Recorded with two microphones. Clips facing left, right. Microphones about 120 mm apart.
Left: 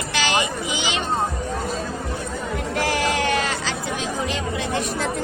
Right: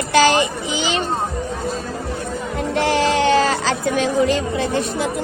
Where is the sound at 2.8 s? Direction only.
25° right (ahead or behind).